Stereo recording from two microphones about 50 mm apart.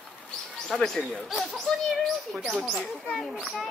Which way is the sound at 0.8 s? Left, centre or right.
Centre.